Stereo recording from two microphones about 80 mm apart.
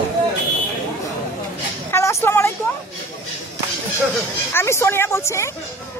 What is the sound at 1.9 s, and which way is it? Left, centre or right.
Vehicle, left.